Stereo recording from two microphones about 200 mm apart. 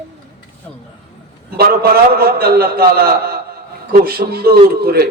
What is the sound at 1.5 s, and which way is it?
A man's voice, 50° right (ahead or behind).